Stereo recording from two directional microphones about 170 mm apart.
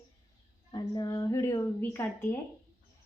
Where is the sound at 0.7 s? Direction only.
25° left (ahead or behind).